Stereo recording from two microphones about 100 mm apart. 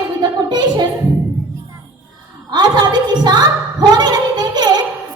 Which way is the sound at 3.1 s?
45° right (ahead or behind).